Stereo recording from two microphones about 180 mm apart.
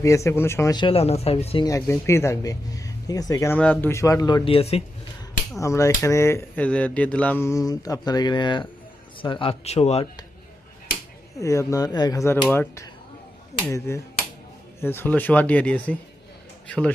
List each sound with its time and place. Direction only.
0.0 s speech: 15° left (ahead or behind); by 1.6 s 35° left (ahead or behind)
1.6 s speech: 15° left (ahead or behind)
4.4 s speech: 35° left (ahead or behind)
5.5 s speech: 15° left (ahead or behind); by 10.1 s 35° left (ahead or behind)
11.3 s speech: 15° left (ahead or behind)